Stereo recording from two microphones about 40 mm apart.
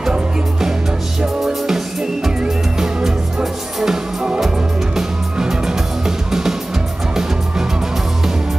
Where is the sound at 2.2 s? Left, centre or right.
Centre.